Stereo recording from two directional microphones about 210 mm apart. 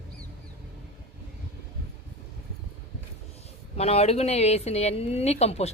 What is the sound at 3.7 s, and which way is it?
A woman's voice, 30° left (ahead or behind).